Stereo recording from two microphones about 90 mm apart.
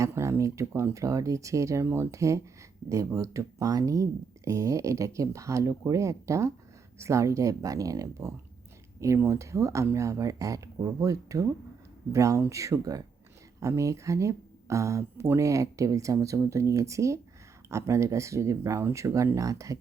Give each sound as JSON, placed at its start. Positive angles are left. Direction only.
{"t": 0.0, "sound": "speech", "side_deg": -35}